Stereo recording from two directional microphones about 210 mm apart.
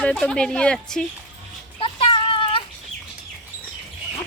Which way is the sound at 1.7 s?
25° left (ahead or behind).